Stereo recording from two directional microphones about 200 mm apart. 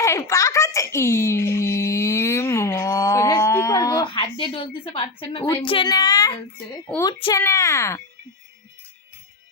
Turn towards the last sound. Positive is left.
turn(degrees=15)  # may be behind; listen again after turning